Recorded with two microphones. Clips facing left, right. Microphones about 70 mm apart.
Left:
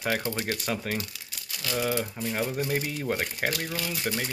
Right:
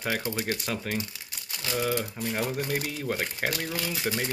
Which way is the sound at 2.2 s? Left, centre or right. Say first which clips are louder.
Even; centre.